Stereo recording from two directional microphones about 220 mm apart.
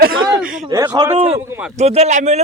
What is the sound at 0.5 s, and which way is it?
Speech, 10° right (ahead or behind).